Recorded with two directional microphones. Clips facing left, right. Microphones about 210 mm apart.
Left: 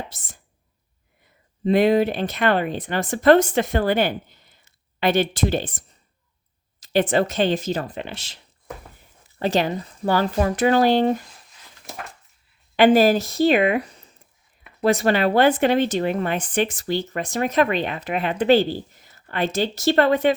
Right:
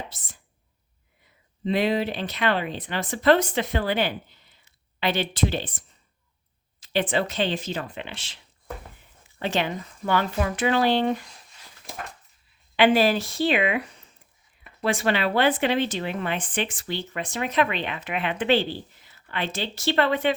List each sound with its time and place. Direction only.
1.6 s speech: 50° left (ahead or behind)
9.4 s speech: 40° left (ahead or behind)
12.7 s speech: 45° left (ahead or behind)